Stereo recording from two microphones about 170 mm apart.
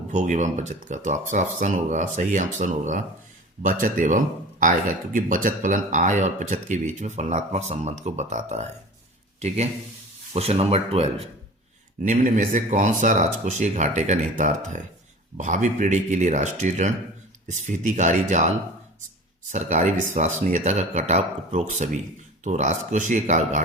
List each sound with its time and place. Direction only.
0.1 s speech: 45° right (ahead or behind)
10.3 s speech: 35° right (ahead or behind)
12.0 s speech: 50° right (ahead or behind)